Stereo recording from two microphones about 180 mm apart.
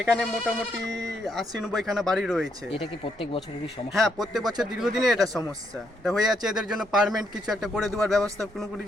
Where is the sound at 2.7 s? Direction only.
30° left (ahead or behind).